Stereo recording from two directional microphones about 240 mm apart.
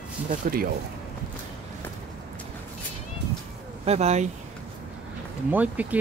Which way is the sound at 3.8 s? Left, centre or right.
Right.